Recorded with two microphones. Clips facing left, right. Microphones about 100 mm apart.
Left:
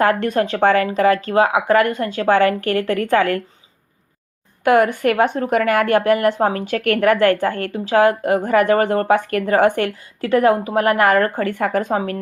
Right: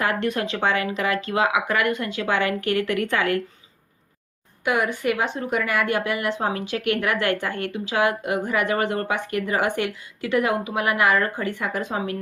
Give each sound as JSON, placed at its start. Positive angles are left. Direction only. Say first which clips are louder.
{"t": 0.0, "sound": "speech", "louder": "left 7 dB", "side_deg": 45}
{"t": 4.6, "sound": "speech", "louder": "left 8 dB", "side_deg": 50}